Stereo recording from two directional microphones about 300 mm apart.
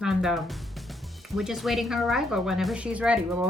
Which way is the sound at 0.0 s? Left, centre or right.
Centre.